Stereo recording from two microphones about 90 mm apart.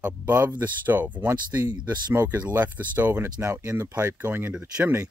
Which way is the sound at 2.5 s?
20° right (ahead or behind).